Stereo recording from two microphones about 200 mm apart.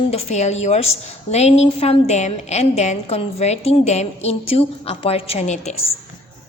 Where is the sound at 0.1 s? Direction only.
30° left (ahead or behind).